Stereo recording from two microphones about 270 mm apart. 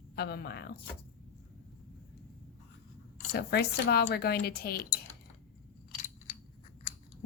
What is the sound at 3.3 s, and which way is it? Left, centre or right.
Speech, left.